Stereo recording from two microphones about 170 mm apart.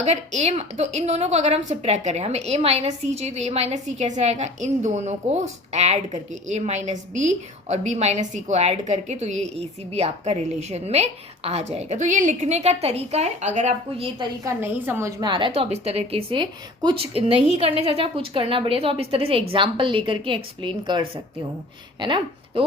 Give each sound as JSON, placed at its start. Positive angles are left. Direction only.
{"t": 0.0, "sound": "a woman's voice", "side_deg": -40}
{"t": 14.2, "sound": "a woman's voice", "side_deg": -15}
{"t": 15.2, "sound": "a woman's voice", "side_deg": -30}